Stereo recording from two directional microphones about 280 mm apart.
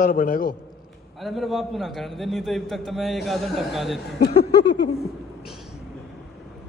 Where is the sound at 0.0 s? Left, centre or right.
Left.